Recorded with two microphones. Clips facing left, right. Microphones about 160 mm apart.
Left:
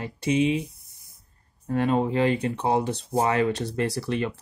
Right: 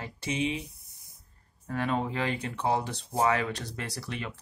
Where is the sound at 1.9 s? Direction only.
45° left (ahead or behind).